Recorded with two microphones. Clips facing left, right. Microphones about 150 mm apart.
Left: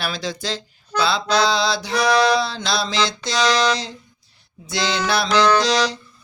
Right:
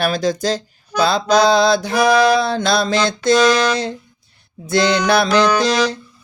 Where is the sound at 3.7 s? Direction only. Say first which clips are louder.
Right 5 dB; 55° right (ahead or behind).